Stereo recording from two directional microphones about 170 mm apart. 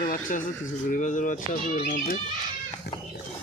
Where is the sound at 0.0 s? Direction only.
50° left (ahead or behind).